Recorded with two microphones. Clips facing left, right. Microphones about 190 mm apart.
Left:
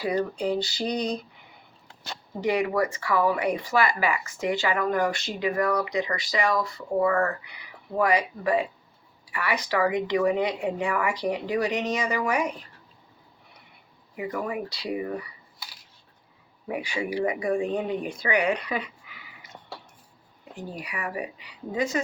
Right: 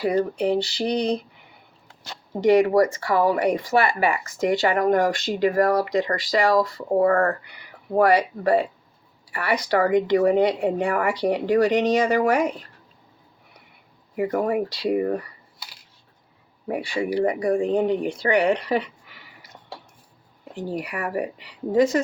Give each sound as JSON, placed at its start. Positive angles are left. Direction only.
{"t": 0.0, "sound": "speech", "side_deg": -55}
{"t": 2.6, "sound": "speech", "side_deg": -40}
{"t": 14.2, "sound": "speech", "side_deg": -50}
{"t": 16.6, "sound": "speech", "side_deg": -40}
{"t": 17.8, "sound": "speech", "side_deg": 5}
{"t": 18.2, "sound": "speech", "side_deg": -35}
{"t": 20.7, "sound": "speech", "side_deg": -50}